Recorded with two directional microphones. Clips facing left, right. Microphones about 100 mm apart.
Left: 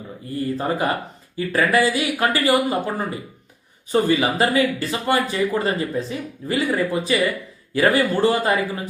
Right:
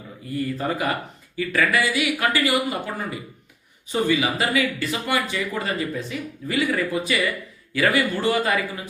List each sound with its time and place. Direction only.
0.3 s speech: 30° left (ahead or behind)